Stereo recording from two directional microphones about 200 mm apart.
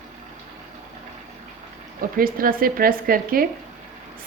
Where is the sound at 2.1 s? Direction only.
45° right (ahead or behind).